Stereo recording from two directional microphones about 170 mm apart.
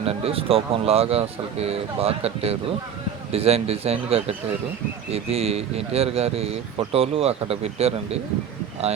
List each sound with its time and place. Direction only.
0.0 s speech: 35° right (ahead or behind)